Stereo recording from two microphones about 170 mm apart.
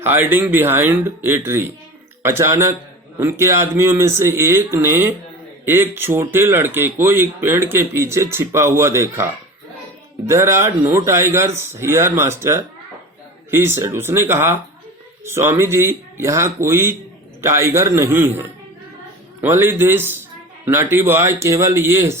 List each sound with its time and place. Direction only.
0.0 s speech: 10° right (ahead or behind)